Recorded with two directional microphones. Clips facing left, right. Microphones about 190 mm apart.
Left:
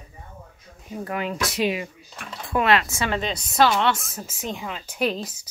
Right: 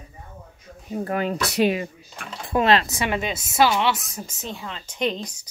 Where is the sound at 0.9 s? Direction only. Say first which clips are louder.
Right 4 dB; 35° right (ahead or behind).